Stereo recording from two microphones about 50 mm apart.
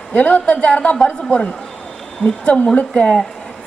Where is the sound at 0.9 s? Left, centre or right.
Centre.